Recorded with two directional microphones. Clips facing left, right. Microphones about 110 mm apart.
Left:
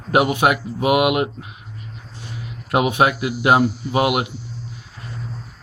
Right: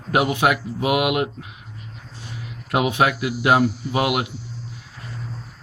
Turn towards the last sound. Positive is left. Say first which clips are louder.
# left 3 dB
turn(degrees=15)  # may be behind; listen again after turning